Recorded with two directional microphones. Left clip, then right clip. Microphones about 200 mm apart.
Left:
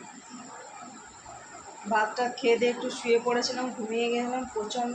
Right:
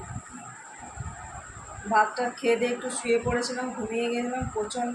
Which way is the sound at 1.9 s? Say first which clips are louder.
Right 3 dB; 15° right (ahead or behind).